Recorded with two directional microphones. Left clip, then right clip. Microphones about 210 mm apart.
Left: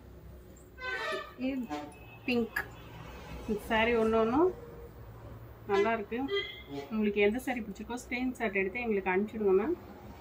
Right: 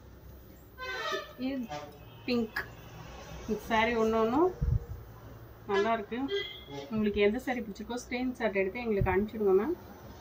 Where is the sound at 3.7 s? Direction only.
5° right (ahead or behind).